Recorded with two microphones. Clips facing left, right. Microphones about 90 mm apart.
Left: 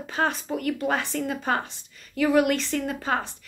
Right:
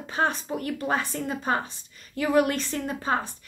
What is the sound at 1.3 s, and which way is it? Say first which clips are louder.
Speech: even; 10° right (ahead or behind).